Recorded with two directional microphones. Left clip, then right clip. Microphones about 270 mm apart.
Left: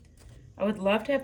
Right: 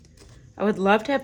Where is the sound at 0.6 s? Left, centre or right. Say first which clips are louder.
Right 6 dB; centre.